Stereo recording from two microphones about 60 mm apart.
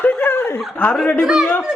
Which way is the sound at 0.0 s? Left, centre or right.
Left.